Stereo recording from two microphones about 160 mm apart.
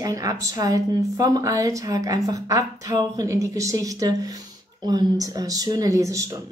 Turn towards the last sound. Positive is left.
turn(degrees=-20)  # may be behind; listen again after turning